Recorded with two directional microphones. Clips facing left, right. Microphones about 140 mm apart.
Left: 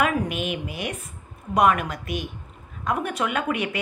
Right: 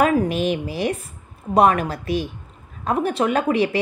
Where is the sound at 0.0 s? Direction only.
35° right (ahead or behind).